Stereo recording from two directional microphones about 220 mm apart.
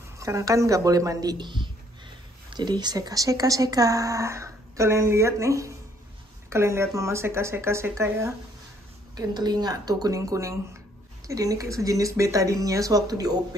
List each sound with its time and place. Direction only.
0.2 s speech: 15° right (ahead or behind)